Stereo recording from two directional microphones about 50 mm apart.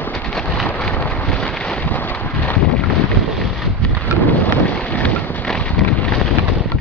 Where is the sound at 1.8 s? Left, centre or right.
Left.